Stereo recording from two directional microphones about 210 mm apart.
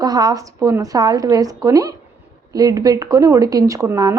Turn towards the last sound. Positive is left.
turn(degrees=-15)  # may be behind; listen again after turning